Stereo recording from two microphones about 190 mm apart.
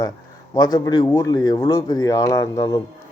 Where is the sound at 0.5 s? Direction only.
20° left (ahead or behind).